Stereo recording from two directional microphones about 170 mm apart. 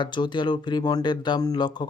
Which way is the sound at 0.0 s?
25° left (ahead or behind).